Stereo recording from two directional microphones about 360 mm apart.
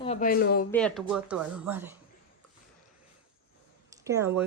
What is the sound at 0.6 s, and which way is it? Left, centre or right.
Speech, centre.